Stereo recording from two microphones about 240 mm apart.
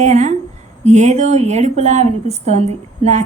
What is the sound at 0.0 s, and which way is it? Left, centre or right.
A woman's voice, right.